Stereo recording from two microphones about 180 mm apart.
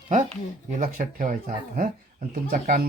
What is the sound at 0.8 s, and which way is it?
Speech, 50° right (ahead or behind).